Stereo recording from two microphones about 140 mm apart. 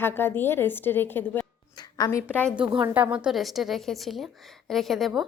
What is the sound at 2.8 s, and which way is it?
A woman's voice, 10° right (ahead or behind).